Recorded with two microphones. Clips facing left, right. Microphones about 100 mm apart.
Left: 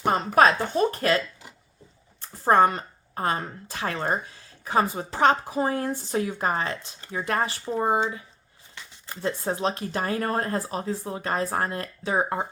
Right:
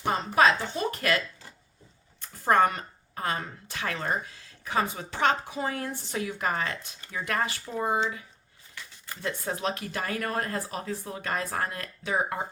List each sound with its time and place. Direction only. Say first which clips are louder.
0.0 s a woman's voice: left 4 dB; 45° left (ahead or behind)
0.9 s speech: left 4 dB; 30° left (ahead or behind)
2.2 s speech: left 3 dB; 30° left (ahead or behind)